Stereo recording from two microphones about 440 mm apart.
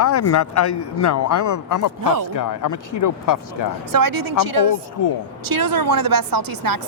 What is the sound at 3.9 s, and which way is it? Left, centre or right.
A woman's voice, right.